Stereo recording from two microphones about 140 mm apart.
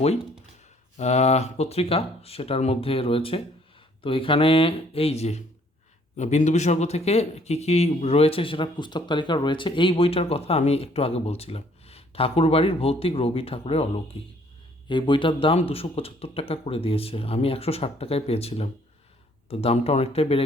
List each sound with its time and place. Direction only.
0.9 s speech: 50° left (ahead or behind)
14.8 s speech: 35° left (ahead or behind)